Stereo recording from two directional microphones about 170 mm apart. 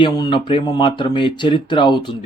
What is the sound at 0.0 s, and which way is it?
Speech, 30° left (ahead or behind).